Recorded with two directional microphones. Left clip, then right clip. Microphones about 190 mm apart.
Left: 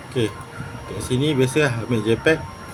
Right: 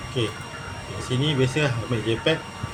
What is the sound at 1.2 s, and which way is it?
Speech, 65° left (ahead or behind).